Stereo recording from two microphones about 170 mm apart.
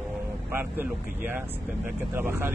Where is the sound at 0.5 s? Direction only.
10° right (ahead or behind).